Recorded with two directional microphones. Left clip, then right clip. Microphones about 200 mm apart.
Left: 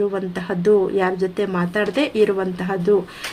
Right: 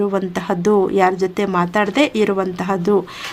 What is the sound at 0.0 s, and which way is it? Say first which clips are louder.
Speech: right 3 dB; 35° right (ahead or behind).